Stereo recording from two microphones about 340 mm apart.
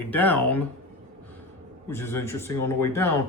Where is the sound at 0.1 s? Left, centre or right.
Centre.